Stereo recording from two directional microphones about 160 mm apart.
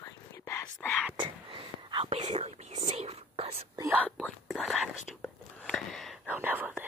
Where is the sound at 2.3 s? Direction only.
40° right (ahead or behind).